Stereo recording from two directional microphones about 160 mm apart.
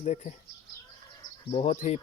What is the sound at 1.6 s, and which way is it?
Speech, 45° left (ahead or behind).